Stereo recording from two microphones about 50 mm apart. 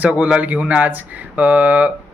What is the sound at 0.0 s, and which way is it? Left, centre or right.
Speech, right.